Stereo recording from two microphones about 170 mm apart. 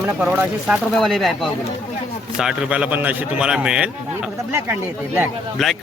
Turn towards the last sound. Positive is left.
turn(degrees=0)  # may be behind; listen again after turning